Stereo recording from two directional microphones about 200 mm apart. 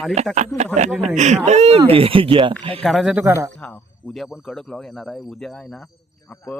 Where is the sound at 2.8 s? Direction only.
Centre (ahead or behind).